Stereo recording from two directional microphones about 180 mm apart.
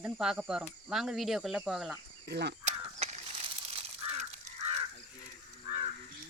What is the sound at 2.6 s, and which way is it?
Mechanisms, 40° right (ahead or behind).